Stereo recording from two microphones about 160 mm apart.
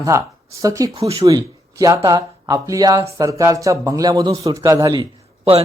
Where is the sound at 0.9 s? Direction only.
35° right (ahead or behind).